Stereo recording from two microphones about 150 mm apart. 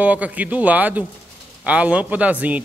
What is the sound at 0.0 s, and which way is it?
A man's voice, 10° right (ahead or behind).